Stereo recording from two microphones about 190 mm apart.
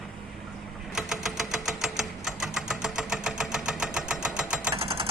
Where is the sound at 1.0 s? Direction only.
Centre (ahead or behind).